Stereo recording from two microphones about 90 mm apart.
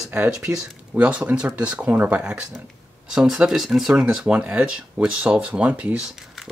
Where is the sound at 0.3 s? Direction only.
5° right (ahead or behind).